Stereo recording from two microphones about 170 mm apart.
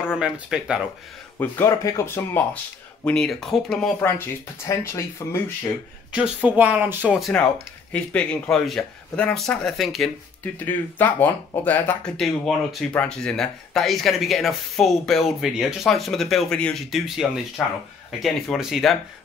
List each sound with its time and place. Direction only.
0.0 s speech: 5° right (ahead or behind)
1.4 s speech: 15° left (ahead or behind)
4.6 s speech: 15° left (ahead or behind)
6.1 s speech: 5° right (ahead or behind); by 12.1 s 10° left (ahead or behind)
12.2 s speech: centre (ahead or behind)